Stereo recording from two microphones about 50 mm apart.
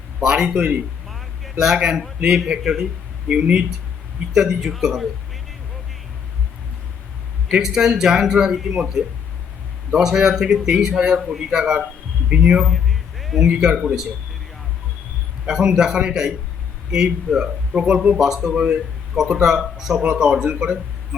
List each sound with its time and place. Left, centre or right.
0.2 s a man's voice: centre
7.4 s a man's voice: centre
9.9 s a man's voice: centre
12.3 s a man's voice: right
12.6 s a sound: centre
13.4 s a man's voice: centre
15.4 s a man's voice: centre
18.1 s a man's voice: centre